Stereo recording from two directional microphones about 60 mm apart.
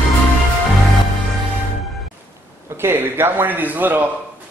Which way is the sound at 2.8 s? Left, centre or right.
Right.